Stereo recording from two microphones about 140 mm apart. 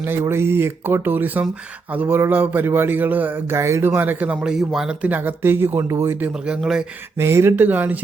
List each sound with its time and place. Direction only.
0.0 s speech: 15° right (ahead or behind)
7.2 s speech: 20° right (ahead or behind)